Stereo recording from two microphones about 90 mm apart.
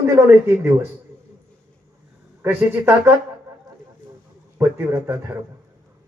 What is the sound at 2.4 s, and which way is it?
Speech, 20° right (ahead or behind).